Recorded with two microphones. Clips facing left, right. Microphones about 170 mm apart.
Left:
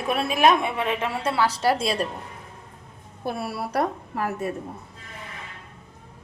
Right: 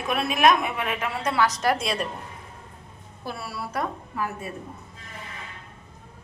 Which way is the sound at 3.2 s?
55° left (ahead or behind).